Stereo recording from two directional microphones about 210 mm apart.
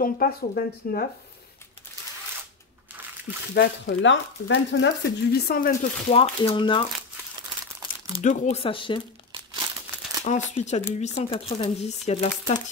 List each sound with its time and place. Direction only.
0.0 s speech: 45° left (ahead or behind)
3.5 s speech: 55° left (ahead or behind); by 6.8 s 25° left (ahead or behind)
8.1 s speech: 35° left (ahead or behind)
10.2 s speech: 35° left (ahead or behind)